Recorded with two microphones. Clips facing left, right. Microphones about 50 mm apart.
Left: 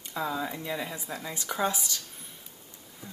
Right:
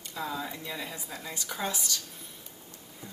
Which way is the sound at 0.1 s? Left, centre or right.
Centre.